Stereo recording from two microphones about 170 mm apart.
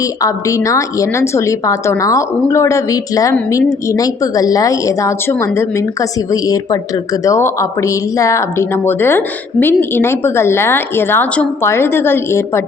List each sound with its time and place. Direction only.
0.0 s a woman's voice: 20° left (ahead or behind)